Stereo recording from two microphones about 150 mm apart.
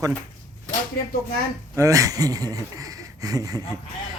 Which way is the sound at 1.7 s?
20° right (ahead or behind).